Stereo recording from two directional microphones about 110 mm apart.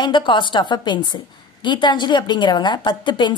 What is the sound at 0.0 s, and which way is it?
A woman's voice, 45° left (ahead or behind).